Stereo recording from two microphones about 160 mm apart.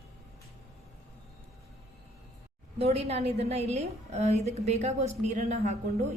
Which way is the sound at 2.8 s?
40° right (ahead or behind).